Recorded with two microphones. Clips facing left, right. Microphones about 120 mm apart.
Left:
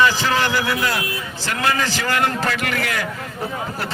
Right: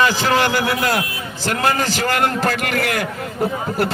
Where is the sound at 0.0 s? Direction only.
40° right (ahead or behind).